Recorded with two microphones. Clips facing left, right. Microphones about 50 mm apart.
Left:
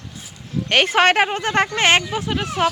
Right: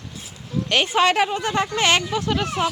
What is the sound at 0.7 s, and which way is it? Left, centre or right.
Speech, left.